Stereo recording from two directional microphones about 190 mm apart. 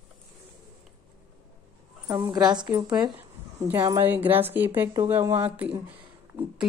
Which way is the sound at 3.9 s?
10° right (ahead or behind).